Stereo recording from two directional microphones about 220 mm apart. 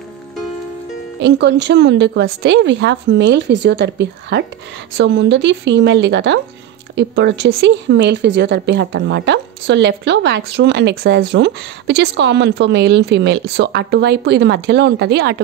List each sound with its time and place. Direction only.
1.2 s speech: 50° right (ahead or behind)